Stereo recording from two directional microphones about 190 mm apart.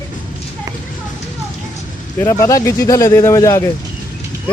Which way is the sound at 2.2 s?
15° left (ahead or behind).